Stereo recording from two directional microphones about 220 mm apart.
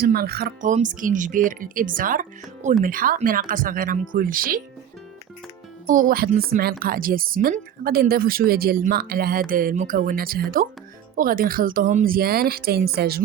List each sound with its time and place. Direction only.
0.0 s speech: 45° right (ahead or behind)
5.8 s a woman's voice: 40° right (ahead or behind)